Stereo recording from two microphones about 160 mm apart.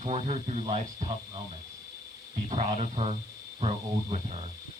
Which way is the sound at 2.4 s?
45° right (ahead or behind).